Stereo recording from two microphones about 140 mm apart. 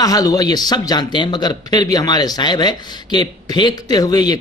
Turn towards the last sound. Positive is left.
turn(degrees=30)  # may be behind; listen again after turning